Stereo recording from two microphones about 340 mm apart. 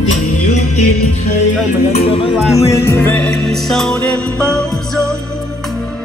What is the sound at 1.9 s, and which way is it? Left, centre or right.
Music, centre.